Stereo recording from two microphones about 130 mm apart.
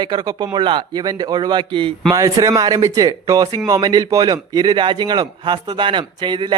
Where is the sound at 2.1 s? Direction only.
25° right (ahead or behind).